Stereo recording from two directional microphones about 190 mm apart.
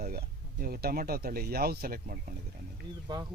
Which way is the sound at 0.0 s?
55° right (ahead or behind).